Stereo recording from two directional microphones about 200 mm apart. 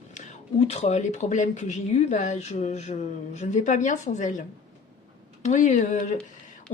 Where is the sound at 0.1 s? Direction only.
35° left (ahead or behind).